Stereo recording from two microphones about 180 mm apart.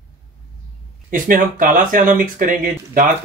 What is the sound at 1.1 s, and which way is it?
Speech, 50° right (ahead or behind).